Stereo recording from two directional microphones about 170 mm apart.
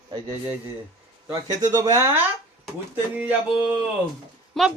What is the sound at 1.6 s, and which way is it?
Speech, 20° right (ahead or behind).